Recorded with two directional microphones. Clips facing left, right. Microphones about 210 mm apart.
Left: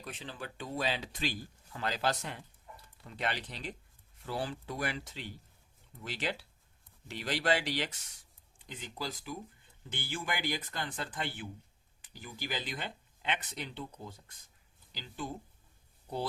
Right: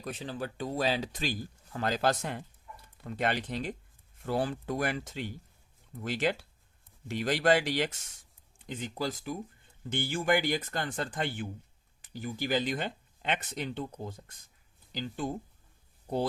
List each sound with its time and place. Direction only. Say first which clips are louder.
0.0 s speech: right 7 dB; 40° right (ahead or behind)